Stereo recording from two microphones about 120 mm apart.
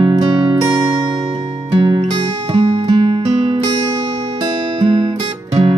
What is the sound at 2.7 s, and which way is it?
Music, 40° right (ahead or behind).